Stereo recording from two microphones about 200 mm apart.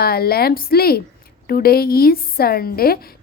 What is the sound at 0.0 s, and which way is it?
A woman's voice, 50° left (ahead or behind).